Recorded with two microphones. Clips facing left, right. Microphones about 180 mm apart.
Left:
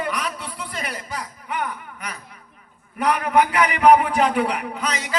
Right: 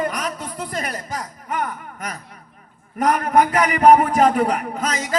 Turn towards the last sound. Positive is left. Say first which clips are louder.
# right 3 dB
turn(degrees=-40)  # may be behind; listen again after turning